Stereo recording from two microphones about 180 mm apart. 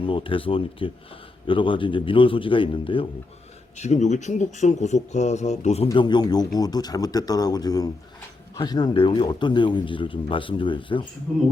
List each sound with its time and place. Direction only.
0.0 s speech: 30° left (ahead or behind)
3.8 s speech: 40° left (ahead or behind)
5.9 s speech: 25° left (ahead or behind)
11.3 s speech: centre (ahead or behind)